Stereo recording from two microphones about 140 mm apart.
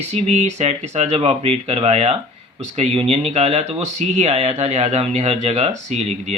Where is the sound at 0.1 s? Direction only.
55° right (ahead or behind).